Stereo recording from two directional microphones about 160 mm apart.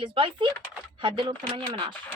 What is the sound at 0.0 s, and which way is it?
A woman's voice, 30° right (ahead or behind).